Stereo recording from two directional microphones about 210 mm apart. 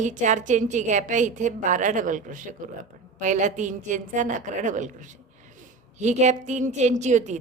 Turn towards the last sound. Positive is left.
turn(degrees=-35)  # may be behind; listen again after turning